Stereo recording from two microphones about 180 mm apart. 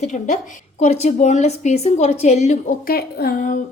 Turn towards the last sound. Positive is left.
turn(degrees=45)  # may be behind; listen again after turning